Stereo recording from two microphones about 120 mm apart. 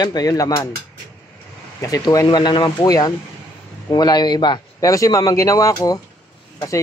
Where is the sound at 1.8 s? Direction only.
30° left (ahead or behind).